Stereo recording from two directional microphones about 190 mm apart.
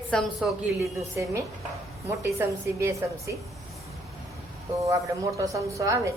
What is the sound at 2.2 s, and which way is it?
A woman's voice, 15° right (ahead or behind).